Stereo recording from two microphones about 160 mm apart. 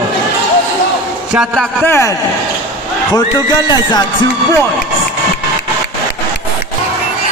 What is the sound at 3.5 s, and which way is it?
Speech, 25° left (ahead or behind).